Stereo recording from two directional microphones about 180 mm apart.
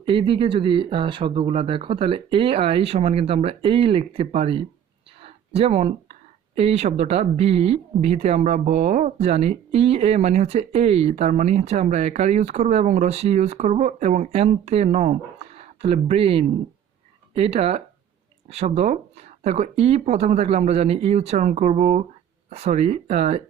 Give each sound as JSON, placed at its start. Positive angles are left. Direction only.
{"t": 0.0, "sound": "speech", "side_deg": -30}
{"t": 5.2, "sound": "a sound", "side_deg": -35}
{"t": 6.6, "sound": "speech", "side_deg": -35}